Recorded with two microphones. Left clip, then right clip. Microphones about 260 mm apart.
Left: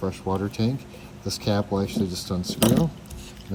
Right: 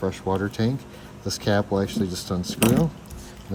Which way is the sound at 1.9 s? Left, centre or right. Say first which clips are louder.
Right 1 dB; centre.